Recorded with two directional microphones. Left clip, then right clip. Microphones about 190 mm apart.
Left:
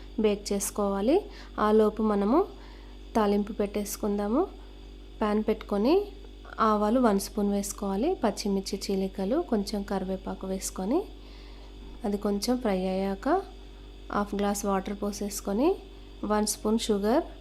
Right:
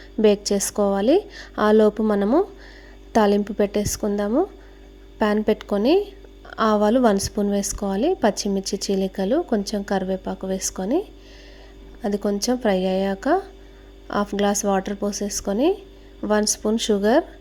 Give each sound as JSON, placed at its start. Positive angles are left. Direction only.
{"t": 0.2, "sound": "a woman's voice", "side_deg": -20}
{"t": 12.0, "sound": "a woman's voice", "side_deg": -20}